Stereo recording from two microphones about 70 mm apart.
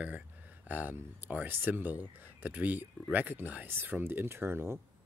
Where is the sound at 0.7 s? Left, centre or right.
Right.